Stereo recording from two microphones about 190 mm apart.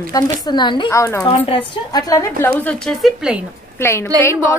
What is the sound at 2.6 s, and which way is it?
Speech, 5° left (ahead or behind).